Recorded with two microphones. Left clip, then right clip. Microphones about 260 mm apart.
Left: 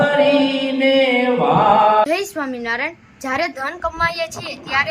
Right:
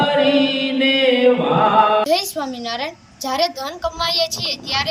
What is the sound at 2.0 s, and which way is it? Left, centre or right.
A woman's voice, centre.